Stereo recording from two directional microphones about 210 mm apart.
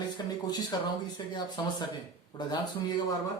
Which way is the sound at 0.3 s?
20° left (ahead or behind).